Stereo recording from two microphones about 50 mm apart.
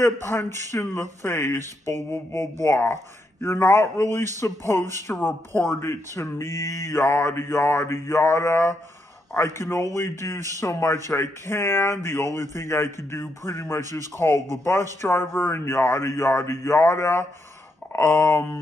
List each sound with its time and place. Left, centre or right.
0.0 s speech: left
2.3 s a man's voice: left
2.9 s speech: left
5.8 s speech: left
7.1 s a man's voice: left
10.6 s a man's voice: left
15.5 s a man's voice: left
17.9 s speech: left